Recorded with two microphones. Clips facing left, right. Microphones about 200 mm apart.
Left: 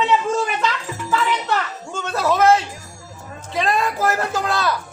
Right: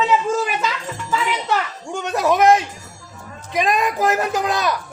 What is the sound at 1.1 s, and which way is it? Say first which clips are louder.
A child's voice: even; 10° right (ahead or behind).